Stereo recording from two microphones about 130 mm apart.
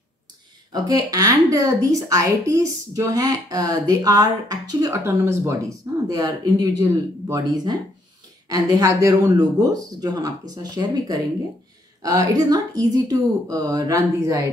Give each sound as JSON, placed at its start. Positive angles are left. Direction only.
{"t": 0.8, "sound": "a woman's voice", "side_deg": -30}
{"t": 5.0, "sound": "a woman's voice", "side_deg": -20}